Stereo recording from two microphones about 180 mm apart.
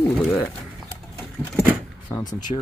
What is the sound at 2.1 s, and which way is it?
Speech, 20° left (ahead or behind).